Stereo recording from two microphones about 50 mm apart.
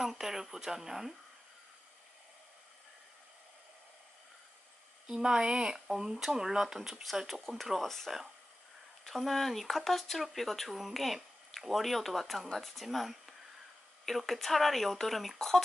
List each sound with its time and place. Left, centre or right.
0.0 s speech: centre
5.0 s speech: centre